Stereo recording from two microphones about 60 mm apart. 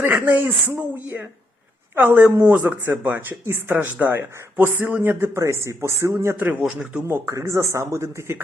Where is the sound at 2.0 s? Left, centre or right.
Right.